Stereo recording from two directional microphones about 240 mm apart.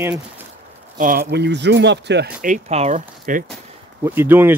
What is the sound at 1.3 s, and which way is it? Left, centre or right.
Speech, right.